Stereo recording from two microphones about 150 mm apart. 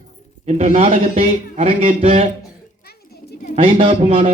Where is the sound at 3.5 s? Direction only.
35° right (ahead or behind).